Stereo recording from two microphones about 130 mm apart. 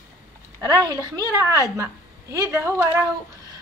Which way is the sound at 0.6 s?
30° right (ahead or behind).